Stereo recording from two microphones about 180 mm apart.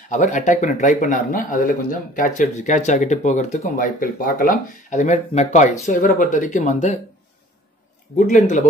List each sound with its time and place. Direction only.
0.1 s a man's voice: 45° left (ahead or behind)
8.2 s a man's voice: 45° left (ahead or behind)